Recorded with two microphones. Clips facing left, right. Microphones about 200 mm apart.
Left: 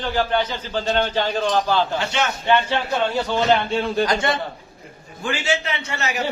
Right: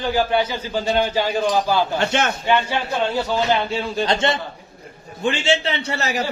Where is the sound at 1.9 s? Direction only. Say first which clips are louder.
Right 3 dB; 50° right (ahead or behind).